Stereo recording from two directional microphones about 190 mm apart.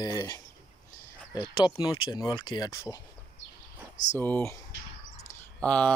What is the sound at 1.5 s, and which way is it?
Speech, 25° left (ahead or behind).